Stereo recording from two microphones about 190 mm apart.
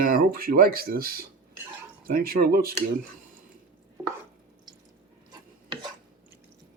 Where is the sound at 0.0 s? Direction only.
50° right (ahead or behind).